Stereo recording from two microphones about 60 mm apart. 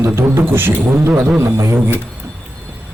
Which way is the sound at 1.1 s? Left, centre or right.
Centre.